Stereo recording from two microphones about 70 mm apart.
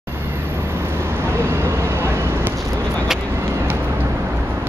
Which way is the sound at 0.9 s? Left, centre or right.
Right.